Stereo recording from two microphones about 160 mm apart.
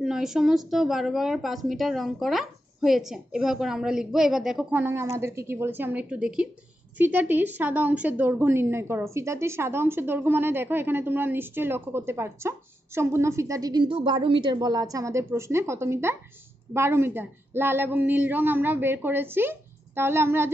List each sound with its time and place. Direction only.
0.0 s a woman's voice: centre (ahead or behind)